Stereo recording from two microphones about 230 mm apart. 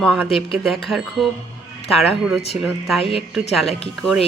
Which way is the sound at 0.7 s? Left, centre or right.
Centre.